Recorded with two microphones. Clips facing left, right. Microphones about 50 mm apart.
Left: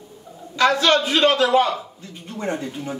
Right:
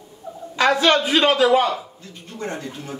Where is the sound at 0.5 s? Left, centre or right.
Right.